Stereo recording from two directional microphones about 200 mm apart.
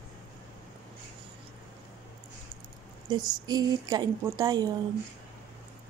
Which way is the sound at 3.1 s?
20° right (ahead or behind).